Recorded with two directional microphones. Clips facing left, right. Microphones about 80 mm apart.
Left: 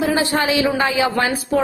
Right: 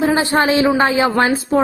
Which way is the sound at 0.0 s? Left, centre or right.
Right.